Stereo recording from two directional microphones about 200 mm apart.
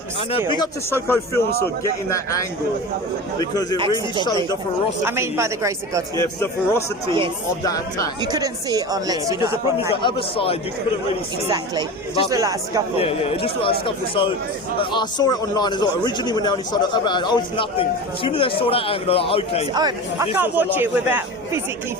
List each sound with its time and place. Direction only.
0.3 s speech: 25° left (ahead or behind)
3.5 s a man's voice: 20° left (ahead or behind)
5.0 s a woman's voice: 10° right (ahead or behind)
6.1 s speech: 15° left (ahead or behind)
8.2 s speech: 20° right (ahead or behind)
10.0 s a man's voice: 25° left (ahead or behind)
11.4 s a woman's voice: 20° right (ahead or behind)
13.0 s a man's voice: 30° left (ahead or behind)
19.7 s a woman's voice: 15° right (ahead or behind)